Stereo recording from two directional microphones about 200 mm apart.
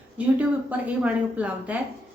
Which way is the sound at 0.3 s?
5° right (ahead or behind).